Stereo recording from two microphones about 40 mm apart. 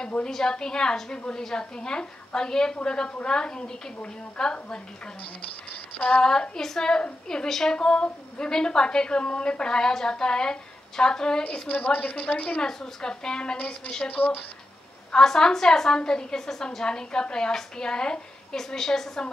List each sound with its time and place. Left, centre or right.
0.3 s a woman's voice: centre
5.9 s child singing: left
6.5 s a woman's voice: centre
7.7 s a woman's voice: left
11.7 s a woman's voice: left
12.6 s a woman's voice: centre
14.1 s a woman's voice: left
15.1 s a woman's voice: centre